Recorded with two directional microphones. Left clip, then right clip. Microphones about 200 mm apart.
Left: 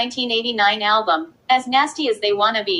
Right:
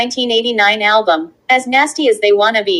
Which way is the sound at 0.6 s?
50° right (ahead or behind).